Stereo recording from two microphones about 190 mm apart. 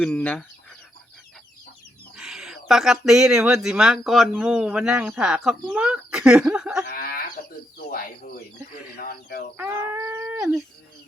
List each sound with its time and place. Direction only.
0.0 s speech: 5° left (ahead or behind)
2.1 s speech: centre (ahead or behind)
6.8 s livestock: 50° left (ahead or behind)
7.8 s speech: 45° left (ahead or behind)
9.6 s a sound: 10° right (ahead or behind)